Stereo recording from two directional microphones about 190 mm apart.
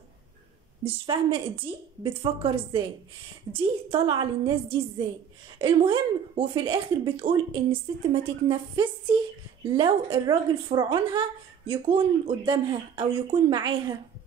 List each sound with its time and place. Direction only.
0.9 s speech: 30° right (ahead or behind)